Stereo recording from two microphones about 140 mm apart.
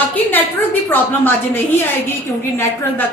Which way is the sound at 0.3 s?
15° left (ahead or behind).